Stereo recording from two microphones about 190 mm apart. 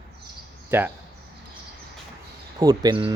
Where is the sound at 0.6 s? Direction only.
10° right (ahead or behind).